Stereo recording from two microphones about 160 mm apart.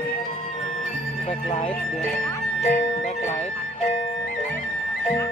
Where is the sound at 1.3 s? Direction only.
45° left (ahead or behind).